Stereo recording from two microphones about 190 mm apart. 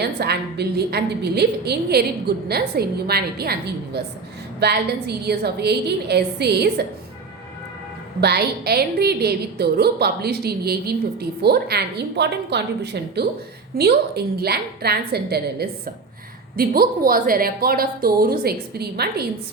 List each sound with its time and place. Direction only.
0.0 s a woman's voice: 60° right (ahead or behind)
8.2 s a woman's voice: 60° right (ahead or behind)